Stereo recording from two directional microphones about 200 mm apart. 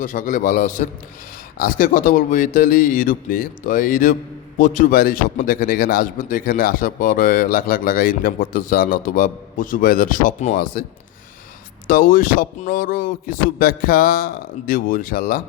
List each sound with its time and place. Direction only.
0.0 s a man's voice: 40° left (ahead or behind)
11.9 s speech: 45° left (ahead or behind)